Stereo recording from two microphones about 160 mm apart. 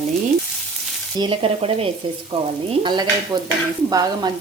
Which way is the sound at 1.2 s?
35° right (ahead or behind).